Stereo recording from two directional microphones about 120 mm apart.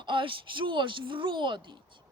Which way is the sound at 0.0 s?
45° right (ahead or behind).